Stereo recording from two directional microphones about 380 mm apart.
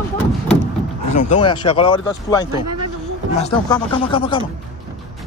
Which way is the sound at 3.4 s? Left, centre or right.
Centre.